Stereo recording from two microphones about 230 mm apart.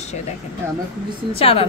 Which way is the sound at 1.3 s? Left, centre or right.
Left.